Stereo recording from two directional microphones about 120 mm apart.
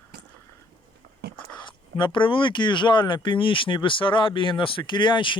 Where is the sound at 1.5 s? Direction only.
40° left (ahead or behind).